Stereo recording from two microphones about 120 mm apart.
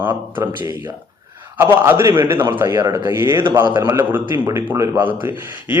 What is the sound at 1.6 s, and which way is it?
A man's voice, 20° right (ahead or behind).